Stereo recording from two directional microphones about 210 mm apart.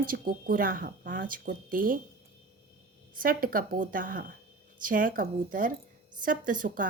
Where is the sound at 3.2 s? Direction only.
40° right (ahead or behind).